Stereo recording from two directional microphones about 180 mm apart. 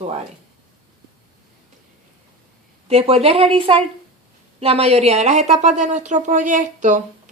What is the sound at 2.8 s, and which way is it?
Speech, 35° right (ahead or behind).